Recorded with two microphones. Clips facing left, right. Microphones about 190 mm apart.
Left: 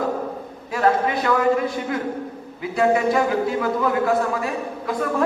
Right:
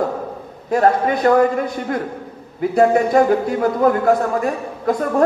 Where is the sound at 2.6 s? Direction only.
45° right (ahead or behind).